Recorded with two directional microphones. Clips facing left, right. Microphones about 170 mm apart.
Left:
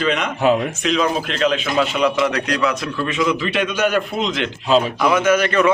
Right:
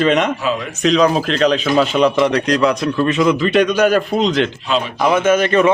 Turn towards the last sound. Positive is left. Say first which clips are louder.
# right 3 dB
turn(degrees=-25)  # may be behind; listen again after turning